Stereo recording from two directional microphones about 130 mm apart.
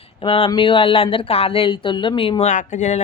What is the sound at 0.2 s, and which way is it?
A woman's voice, 45° left (ahead or behind).